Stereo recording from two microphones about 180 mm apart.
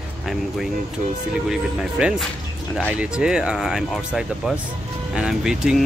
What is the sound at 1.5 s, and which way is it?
Speech, 5° right (ahead or behind).